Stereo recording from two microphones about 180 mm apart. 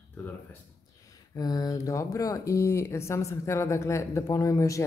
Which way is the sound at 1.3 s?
20° left (ahead or behind).